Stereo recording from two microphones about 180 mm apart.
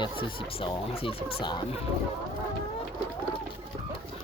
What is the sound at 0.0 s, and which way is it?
Speech, 30° left (ahead or behind).